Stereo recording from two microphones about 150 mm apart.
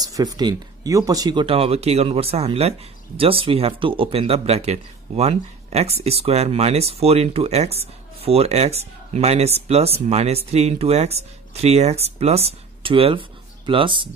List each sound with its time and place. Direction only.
0.0 s speech: 25° right (ahead or behind)